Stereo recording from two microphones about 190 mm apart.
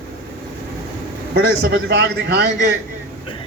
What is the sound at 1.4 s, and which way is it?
A man's voice, 70° right (ahead or behind).